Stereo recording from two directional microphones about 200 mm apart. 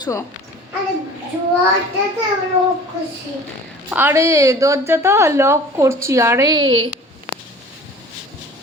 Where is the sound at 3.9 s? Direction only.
10° right (ahead or behind); by 6.9 s 25° right (ahead or behind).